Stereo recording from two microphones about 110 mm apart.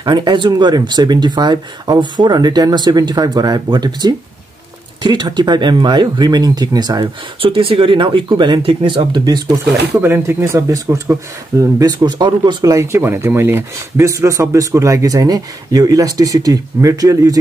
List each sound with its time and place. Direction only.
0.0 s speech: 45° right (ahead or behind)
7.4 s speech: 55° right (ahead or behind); by 9.6 s 40° right (ahead or behind)
9.9 s speech: 20° right (ahead or behind)